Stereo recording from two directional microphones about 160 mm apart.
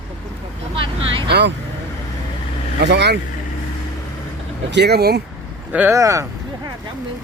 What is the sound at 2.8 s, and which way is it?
Speech, 90° right.